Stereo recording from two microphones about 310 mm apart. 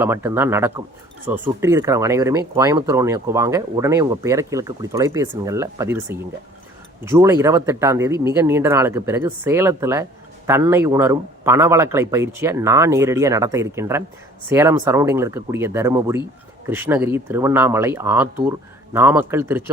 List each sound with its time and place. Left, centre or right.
0.0 s speech: centre